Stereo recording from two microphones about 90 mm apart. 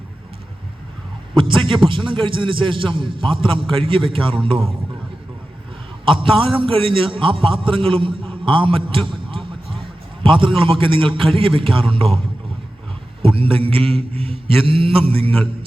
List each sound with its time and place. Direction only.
1.4 s a man's voice: 70° right (ahead or behind)
6.1 s a man's voice: 75° right (ahead or behind)
13.2 s a man's voice: 90° right